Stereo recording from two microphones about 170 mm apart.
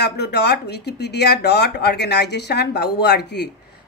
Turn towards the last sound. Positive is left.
turn(degrees=75)  # may be behind; listen again after turning